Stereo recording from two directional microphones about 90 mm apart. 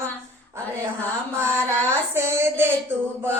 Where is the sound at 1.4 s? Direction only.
30° right (ahead or behind).